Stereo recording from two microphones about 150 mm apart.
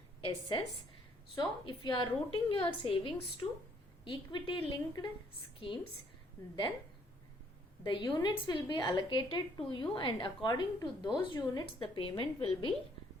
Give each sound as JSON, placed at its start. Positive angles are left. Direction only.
{"t": 0.2, "sound": "a woman's voice", "side_deg": 35}
{"t": 7.9, "sound": "a woman's voice", "side_deg": 30}